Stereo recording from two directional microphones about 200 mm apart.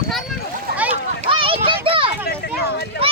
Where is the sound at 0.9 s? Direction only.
25° right (ahead or behind).